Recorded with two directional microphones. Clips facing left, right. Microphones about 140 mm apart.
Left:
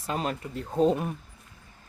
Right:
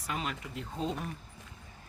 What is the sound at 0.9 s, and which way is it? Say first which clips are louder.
Speech: left 9 dB; 65° left (ahead or behind).